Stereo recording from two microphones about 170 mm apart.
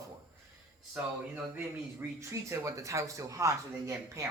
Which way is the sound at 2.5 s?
20° right (ahead or behind).